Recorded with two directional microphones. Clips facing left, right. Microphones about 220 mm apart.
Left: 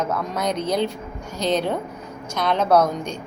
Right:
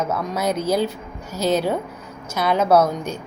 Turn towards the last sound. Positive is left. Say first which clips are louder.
# right 1 dB
turn(degrees=-5)  # may be behind; listen again after turning